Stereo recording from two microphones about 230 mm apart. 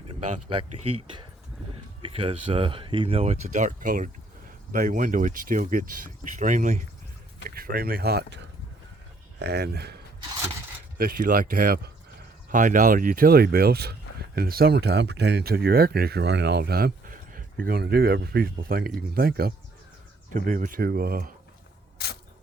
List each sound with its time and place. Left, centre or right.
0.7 s speech: right
2.0 s speech: right
9.4 s speech: right
21.9 s a sound: left